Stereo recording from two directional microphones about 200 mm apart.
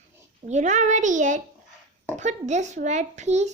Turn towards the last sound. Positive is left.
turn(degrees=-35)  # may be behind; listen again after turning